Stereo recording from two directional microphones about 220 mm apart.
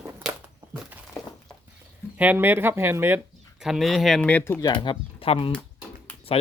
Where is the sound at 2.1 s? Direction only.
5° right (ahead or behind).